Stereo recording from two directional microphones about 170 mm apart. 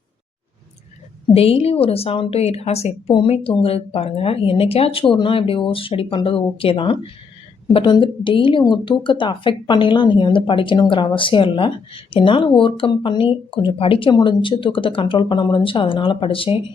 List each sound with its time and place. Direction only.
1.3 s speech: 35° left (ahead or behind)